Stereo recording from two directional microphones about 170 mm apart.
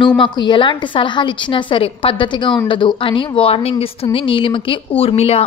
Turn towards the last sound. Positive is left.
turn(degrees=35)  # may be behind; listen again after turning